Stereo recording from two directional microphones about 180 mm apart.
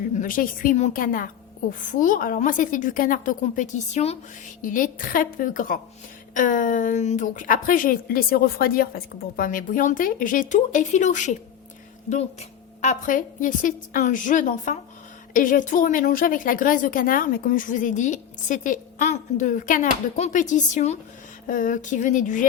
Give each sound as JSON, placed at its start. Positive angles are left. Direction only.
{"t": 0.2, "sound": "a woman's voice", "side_deg": 50}
{"t": 4.6, "sound": "a woman's voice", "side_deg": 50}